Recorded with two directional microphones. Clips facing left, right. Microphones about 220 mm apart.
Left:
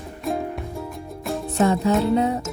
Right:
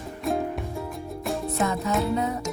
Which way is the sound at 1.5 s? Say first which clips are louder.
Left 8 dB; 30° left (ahead or behind).